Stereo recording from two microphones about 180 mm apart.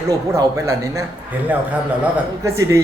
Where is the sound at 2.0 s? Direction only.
15° right (ahead or behind).